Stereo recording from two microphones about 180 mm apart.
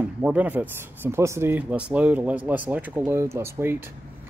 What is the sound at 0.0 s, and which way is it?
Speech, 10° right (ahead or behind).